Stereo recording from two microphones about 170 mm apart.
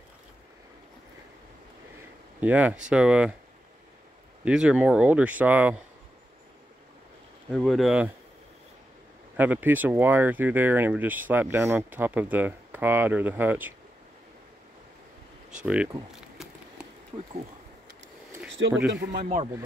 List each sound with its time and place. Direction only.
2.4 s speech: 10° right (ahead or behind)
4.5 s speech: 5° right (ahead or behind)
7.5 s speech: centre (ahead or behind)
9.4 s speech: 10° right (ahead or behind)
15.5 s speech: 5° right (ahead or behind)
16.4 s a sound: centre (ahead or behind)
18.6 s a man's voice: 90° right
18.9 s speech: 60° right (ahead or behind)